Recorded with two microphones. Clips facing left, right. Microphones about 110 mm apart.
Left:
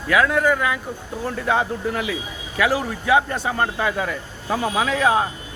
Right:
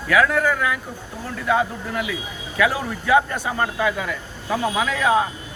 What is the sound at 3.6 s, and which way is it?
A man's voice, 35° left (ahead or behind).